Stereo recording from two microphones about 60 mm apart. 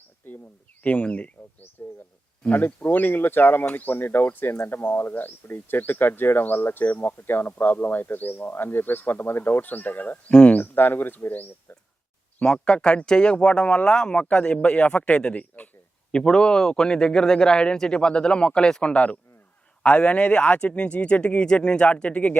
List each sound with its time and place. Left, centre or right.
0.8 s speech: left
1.8 s speech: left
12.6 s speech: centre
16.1 s a man's voice: centre